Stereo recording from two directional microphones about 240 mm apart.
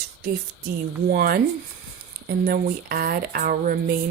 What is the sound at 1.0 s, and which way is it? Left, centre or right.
Speech, right.